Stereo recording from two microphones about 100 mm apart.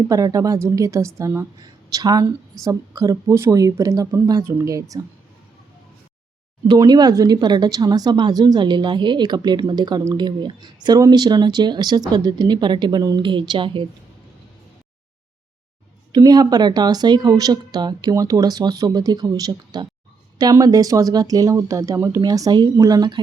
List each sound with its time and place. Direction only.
0.1 s a woman's voice: 35° right (ahead or behind)
6.7 s speech: 45° right (ahead or behind)
16.1 s a woman's voice: 40° right (ahead or behind)